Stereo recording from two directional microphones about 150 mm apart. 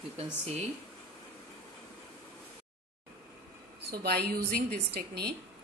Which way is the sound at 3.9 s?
90° right.